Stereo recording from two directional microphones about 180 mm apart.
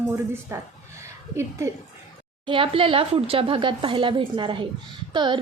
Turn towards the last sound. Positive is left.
turn(degrees=-25)  # may be behind; listen again after turning